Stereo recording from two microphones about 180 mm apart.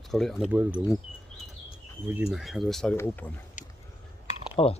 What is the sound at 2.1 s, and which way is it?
Speech, 5° right (ahead or behind).